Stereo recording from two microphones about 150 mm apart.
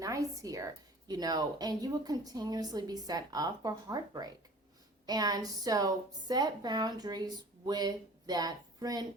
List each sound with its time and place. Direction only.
0.0 s a woman's voice: 20° right (ahead or behind)